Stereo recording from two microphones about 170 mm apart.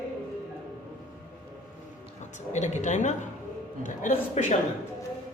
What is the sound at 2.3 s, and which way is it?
A woman's voice, 45° left (ahead or behind).